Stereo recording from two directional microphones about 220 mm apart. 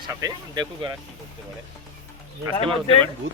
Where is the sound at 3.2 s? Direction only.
60° right (ahead or behind).